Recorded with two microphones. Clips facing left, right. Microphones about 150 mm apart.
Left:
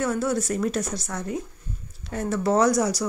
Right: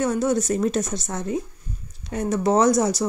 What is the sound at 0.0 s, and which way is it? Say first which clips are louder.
Speech: right 3 dB; 20° right (ahead or behind).